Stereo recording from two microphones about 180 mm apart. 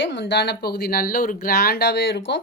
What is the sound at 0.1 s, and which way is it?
Speech, 80° left.